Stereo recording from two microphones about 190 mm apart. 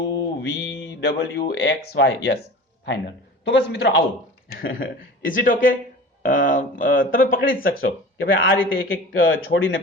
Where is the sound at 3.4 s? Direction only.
65° left (ahead or behind).